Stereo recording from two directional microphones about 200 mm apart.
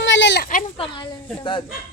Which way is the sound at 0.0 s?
65° left (ahead or behind).